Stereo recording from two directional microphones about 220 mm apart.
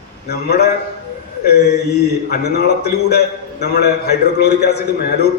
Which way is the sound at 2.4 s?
45° left (ahead or behind).